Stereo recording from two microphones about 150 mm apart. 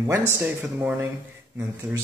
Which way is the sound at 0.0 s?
15° right (ahead or behind).